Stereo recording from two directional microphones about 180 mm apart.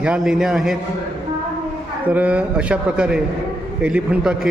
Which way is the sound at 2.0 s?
10° right (ahead or behind).